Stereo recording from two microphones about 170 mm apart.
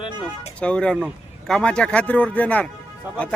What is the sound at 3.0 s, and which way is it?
Speech, 10° right (ahead or behind).